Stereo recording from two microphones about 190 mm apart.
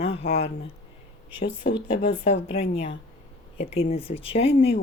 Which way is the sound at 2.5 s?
35° left (ahead or behind).